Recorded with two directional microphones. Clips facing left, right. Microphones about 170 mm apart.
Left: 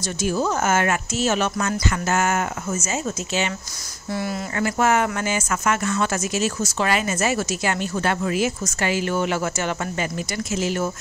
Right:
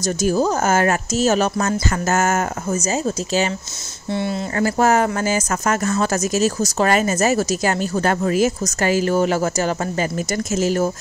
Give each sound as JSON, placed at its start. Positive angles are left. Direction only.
{"t": 0.0, "sound": "speech", "side_deg": -40}
{"t": 4.1, "sound": "speech", "side_deg": -25}
{"t": 4.6, "sound": "speech", "side_deg": -40}